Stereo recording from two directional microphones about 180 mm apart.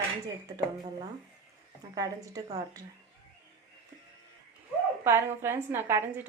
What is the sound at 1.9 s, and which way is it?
Speech, 20° right (ahead or behind).